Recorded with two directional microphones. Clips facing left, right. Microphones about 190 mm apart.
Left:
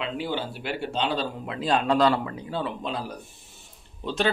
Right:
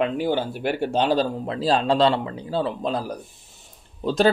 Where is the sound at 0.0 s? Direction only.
50° right (ahead or behind).